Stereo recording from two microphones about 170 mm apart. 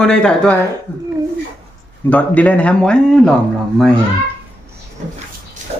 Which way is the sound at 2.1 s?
10° left (ahead or behind).